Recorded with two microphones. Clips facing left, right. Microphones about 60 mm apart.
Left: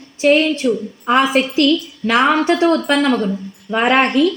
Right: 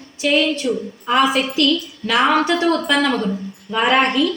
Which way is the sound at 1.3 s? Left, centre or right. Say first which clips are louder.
Left 3 dB; left.